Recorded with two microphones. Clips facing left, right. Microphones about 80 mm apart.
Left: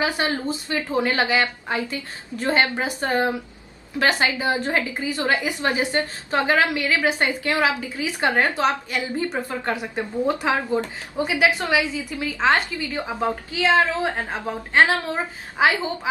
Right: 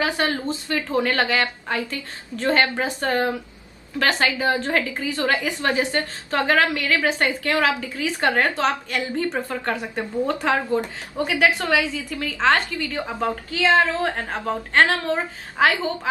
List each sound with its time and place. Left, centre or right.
0.0 s a woman's voice: centre
13.8 s a woman's voice: centre